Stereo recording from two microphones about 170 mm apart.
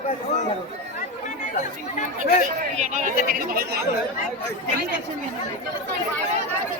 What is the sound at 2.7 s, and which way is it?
Speech, 45° right (ahead or behind).